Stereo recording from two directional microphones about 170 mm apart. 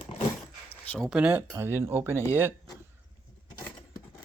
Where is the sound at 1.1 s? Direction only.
10° right (ahead or behind).